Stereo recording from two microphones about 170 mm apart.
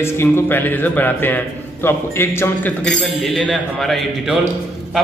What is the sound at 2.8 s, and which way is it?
A man's voice, 5° left (ahead or behind).